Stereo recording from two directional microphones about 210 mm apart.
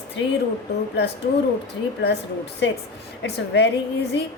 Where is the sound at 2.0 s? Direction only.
55° left (ahead or behind).